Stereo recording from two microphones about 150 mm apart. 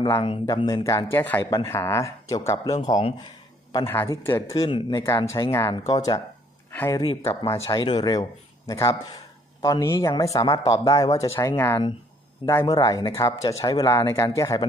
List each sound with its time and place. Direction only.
0.5 s speech: 25° left (ahead or behind)
6.7 s speech: 15° left (ahead or behind)
7.0 s speech: 25° left (ahead or behind)
7.7 s speech: 30° left (ahead or behind)